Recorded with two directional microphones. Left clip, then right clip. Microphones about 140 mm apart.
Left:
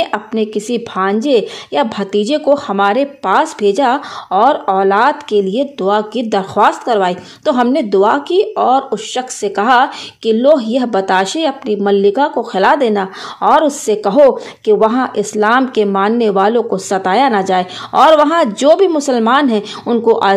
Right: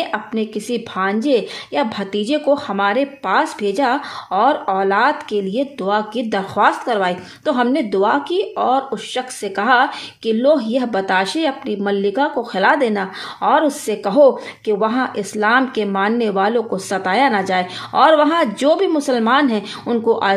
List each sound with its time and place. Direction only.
0.0 s a woman's voice: 40° left (ahead or behind)